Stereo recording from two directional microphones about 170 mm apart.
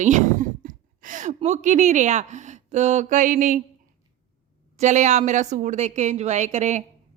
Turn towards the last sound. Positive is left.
turn(degrees=-45)  # may be behind; listen again after turning